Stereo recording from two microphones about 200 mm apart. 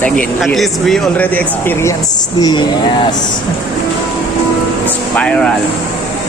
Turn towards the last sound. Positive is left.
turn(degrees=5)  # may be behind; listen again after turning